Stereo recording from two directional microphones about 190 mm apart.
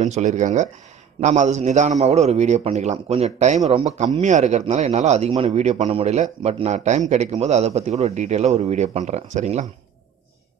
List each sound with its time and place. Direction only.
0.0 s a man's voice: 40° right (ahead or behind)